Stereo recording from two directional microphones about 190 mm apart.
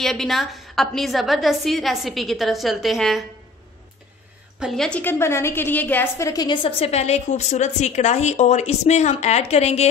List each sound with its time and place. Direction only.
0.0 s a woman's voice: centre (ahead or behind)
4.6 s a woman's voice: centre (ahead or behind); by 9.8 s 35° left (ahead or behind)